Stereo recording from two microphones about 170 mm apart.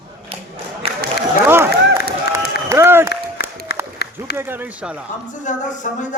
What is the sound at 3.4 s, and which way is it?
Applause, 65° left (ahead or behind).